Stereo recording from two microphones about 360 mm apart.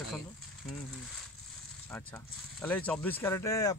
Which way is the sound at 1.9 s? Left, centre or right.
Centre.